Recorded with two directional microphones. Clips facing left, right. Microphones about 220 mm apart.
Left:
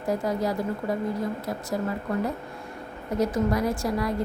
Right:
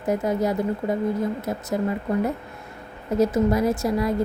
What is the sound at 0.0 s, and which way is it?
A woman's voice, 20° right (ahead or behind).